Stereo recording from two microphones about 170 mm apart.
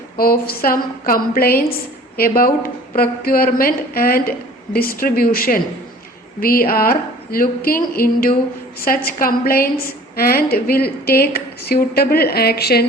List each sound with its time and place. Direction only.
0.2 s a woman's voice: 60° left (ahead or behind)